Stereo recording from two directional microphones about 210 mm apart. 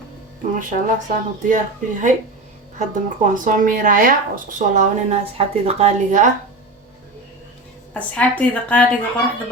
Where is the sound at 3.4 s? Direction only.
40° right (ahead or behind).